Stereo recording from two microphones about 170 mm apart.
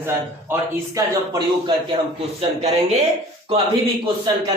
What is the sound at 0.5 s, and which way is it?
Speech, 15° right (ahead or behind).